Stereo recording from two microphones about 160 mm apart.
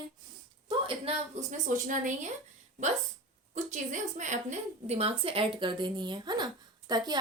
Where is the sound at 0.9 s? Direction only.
40° right (ahead or behind).